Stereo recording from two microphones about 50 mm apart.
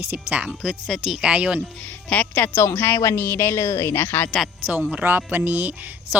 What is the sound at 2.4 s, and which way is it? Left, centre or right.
Speech, left.